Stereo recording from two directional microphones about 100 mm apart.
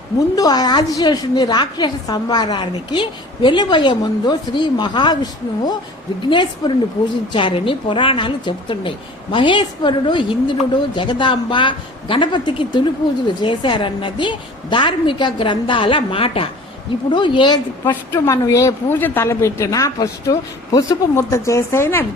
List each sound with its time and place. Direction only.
0.3 s a woman's voice: 40° left (ahead or behind); by 16.5 s 70° left (ahead or behind)
17.1 s a woman's voice: 55° left (ahead or behind)
17.8 s speech: 25° left (ahead or behind)